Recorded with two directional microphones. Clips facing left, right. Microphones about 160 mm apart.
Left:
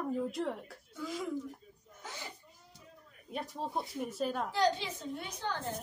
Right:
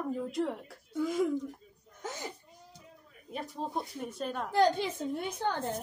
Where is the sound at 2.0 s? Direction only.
45° right (ahead or behind).